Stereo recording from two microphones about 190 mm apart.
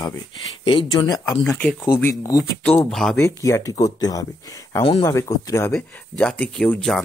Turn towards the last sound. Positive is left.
turn(degrees=5)  # may be behind; listen again after turning